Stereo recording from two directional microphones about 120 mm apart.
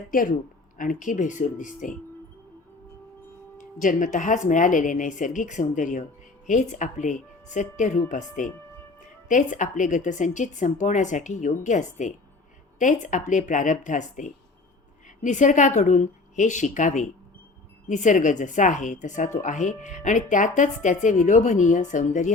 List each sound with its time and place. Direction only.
0.9 s speech: 90° left
3.6 s speech: 90° left